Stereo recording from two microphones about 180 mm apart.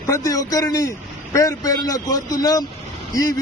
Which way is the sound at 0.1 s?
20° left (ahead or behind).